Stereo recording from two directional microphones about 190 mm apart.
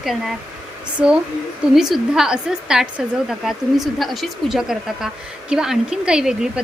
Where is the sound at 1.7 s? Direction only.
Centre (ahead or behind).